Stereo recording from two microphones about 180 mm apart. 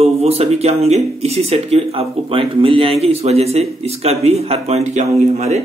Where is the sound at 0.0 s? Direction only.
35° right (ahead or behind).